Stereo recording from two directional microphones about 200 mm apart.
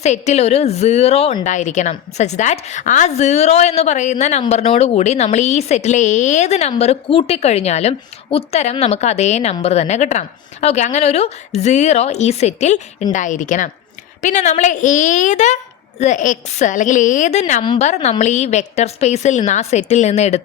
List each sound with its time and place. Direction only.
0.0 s speech: 35° left (ahead or behind)
17.6 s a woman's voice: 25° left (ahead or behind)
17.8 s speech: 35° left (ahead or behind)